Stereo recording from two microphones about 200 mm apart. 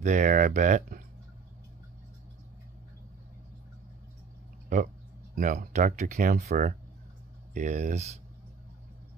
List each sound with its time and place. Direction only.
0.0 s speech: 40° right (ahead or behind)
5.3 s speech: 45° right (ahead or behind)